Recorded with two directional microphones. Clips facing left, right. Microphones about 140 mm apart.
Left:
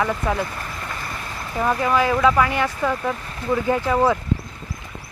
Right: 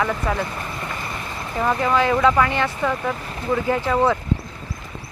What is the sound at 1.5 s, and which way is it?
Speech, 5° left (ahead or behind).